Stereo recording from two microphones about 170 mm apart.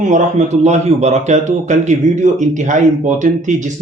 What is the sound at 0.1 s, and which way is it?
Speech, 40° right (ahead or behind).